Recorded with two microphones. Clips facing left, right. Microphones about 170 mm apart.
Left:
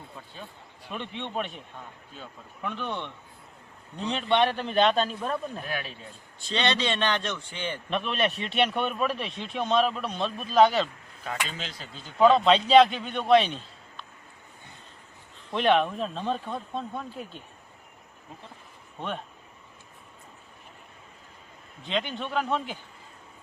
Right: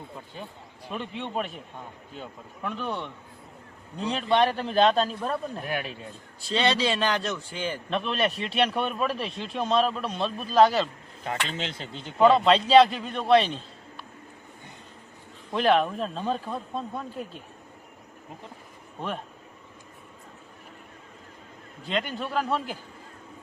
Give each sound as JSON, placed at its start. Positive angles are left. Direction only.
{"t": 0.9, "sound": "a man's voice", "side_deg": -5}
{"t": 2.6, "sound": "a man's voice", "side_deg": -5}
{"t": 11.6, "sound": "speech", "side_deg": -25}
{"t": 12.2, "sound": "a man's voice", "side_deg": 0}
{"t": 15.5, "sound": "a man's voice", "side_deg": 0}
{"t": 18.9, "sound": "a man's voice", "side_deg": -5}
{"t": 21.8, "sound": "a man's voice", "side_deg": -5}